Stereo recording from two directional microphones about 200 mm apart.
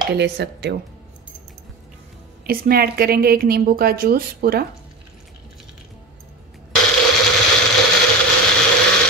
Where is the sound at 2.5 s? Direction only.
50° right (ahead or behind).